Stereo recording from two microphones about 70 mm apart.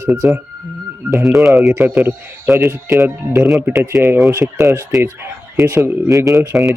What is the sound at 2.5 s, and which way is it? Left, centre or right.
Speech, right.